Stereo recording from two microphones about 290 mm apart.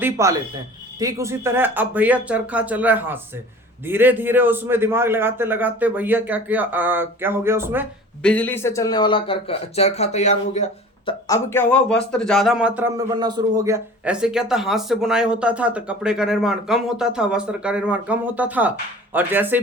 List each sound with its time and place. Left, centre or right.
0.0 s a man's voice: centre
8.2 s speech: centre; by 11.1 s left
11.3 s a man's voice: centre